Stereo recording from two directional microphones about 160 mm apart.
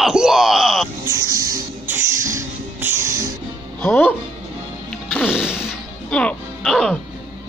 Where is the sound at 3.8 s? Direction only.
10° left (ahead or behind).